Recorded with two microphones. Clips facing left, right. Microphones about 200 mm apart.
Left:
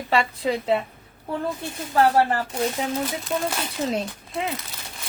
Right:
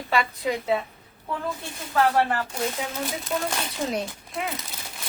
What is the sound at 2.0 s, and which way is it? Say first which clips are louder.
Speech: left 3 dB; 35° left (ahead or behind).